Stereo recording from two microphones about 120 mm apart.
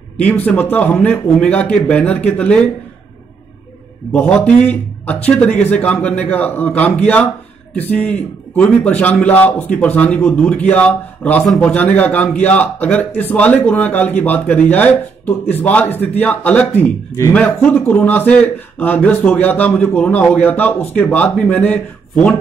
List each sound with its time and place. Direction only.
0.2 s a man's voice: 15° left (ahead or behind)
4.1 s a man's voice: 10° left (ahead or behind)
17.1 s a man's voice: 20° left (ahead or behind)